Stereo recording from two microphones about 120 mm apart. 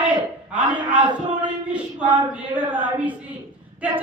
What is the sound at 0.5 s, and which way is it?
A woman's voice, 10° right (ahead or behind).